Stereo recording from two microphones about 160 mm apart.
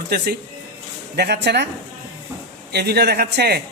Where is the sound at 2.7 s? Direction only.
90° right.